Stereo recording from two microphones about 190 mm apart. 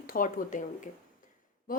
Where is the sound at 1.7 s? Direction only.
45° left (ahead or behind).